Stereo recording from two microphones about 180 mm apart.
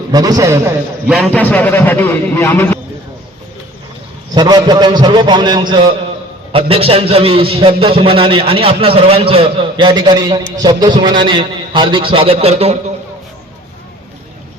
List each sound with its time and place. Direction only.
0.1 s a man's voice: 20° right (ahead or behind)
1.2 s speech: 5° left (ahead or behind)
4.4 s a man's voice: 25° right (ahead or behind)